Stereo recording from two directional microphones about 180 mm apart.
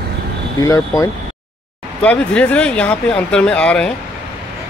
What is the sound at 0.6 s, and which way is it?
Speech, 20° left (ahead or behind).